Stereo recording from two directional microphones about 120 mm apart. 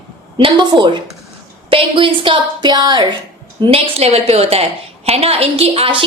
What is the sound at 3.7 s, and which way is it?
A woman's voice, 55° right (ahead or behind).